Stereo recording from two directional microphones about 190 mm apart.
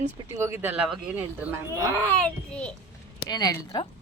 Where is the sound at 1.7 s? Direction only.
15° left (ahead or behind).